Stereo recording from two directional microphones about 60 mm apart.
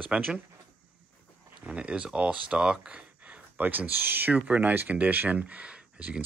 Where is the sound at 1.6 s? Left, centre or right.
Centre.